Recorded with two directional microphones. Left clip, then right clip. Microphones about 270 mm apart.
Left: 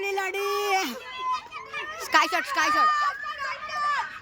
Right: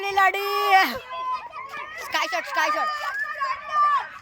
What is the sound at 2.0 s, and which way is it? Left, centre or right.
Speech, centre.